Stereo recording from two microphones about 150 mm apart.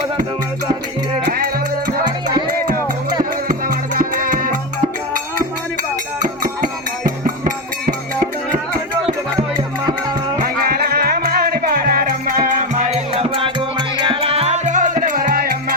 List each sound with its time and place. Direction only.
3.5 s music: 70° right (ahead or behind)
6.2 s music: 70° right (ahead or behind)
10.3 s music: 75° right (ahead or behind)